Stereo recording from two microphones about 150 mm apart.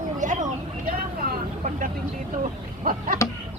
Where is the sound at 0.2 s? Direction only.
55° right (ahead or behind).